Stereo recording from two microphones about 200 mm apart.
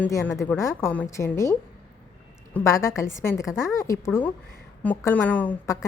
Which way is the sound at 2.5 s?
15° left (ahead or behind).